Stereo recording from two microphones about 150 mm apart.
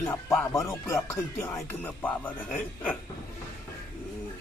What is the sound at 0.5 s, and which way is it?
Speech, 20° left (ahead or behind).